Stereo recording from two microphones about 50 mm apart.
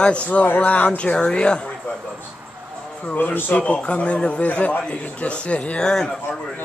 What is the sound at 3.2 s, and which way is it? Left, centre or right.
A man's voice, left.